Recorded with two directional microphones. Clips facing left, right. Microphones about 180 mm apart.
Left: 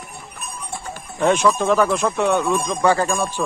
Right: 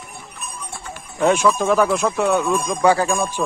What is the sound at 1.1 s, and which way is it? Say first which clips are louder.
Speech: even; 5° right (ahead or behind).